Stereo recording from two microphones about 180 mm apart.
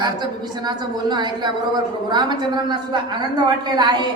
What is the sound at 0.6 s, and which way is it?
A woman's voice, 25° right (ahead or behind).